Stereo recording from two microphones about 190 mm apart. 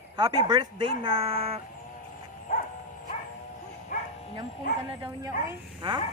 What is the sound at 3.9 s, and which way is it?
Bow-wow, 45° left (ahead or behind).